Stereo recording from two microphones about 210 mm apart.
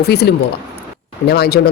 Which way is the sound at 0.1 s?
50° left (ahead or behind).